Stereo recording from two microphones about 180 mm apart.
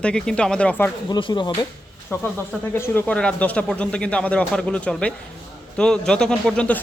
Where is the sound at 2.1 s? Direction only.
10° left (ahead or behind).